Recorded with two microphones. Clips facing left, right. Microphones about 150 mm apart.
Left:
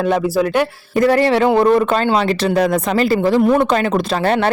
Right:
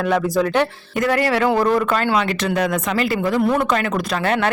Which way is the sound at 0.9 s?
30° left (ahead or behind).